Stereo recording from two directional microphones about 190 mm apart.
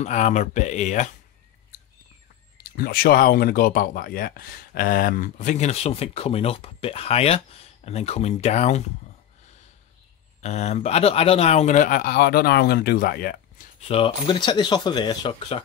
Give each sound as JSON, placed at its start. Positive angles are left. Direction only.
{"t": 0.0, "sound": "speech", "side_deg": 40}
{"t": 2.5, "sound": "speech", "side_deg": 50}
{"t": 10.4, "sound": "speech", "side_deg": 35}
{"t": 13.7, "sound": "speech", "side_deg": 30}